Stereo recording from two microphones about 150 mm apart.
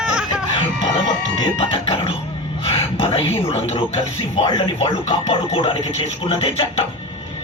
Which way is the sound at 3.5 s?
45° left (ahead or behind).